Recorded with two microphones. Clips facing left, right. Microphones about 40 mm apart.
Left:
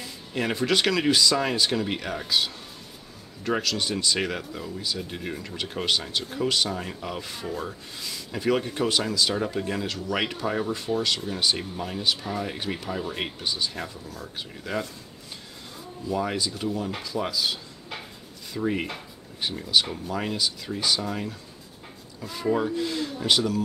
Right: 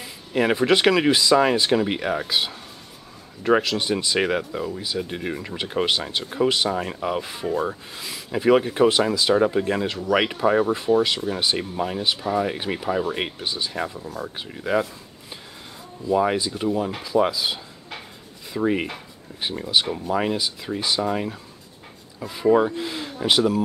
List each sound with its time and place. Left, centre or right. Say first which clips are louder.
0.0 s speech: right 7 dB; centre
16.2 s speech: right 6 dB; centre